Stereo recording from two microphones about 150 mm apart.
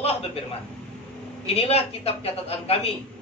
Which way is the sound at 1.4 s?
40° left (ahead or behind).